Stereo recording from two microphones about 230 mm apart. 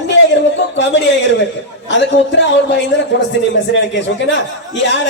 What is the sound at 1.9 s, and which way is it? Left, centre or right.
A man's voice, left.